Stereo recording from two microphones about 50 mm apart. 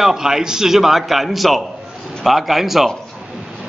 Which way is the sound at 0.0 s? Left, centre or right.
Centre.